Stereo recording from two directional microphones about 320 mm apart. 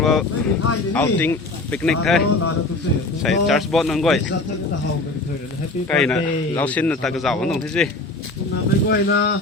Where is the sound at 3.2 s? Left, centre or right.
Centre.